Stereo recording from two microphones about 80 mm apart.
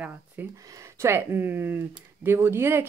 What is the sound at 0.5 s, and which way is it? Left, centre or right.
Speech, right.